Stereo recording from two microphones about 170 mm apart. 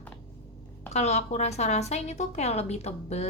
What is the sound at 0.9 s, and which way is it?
Speech, 40° left (ahead or behind).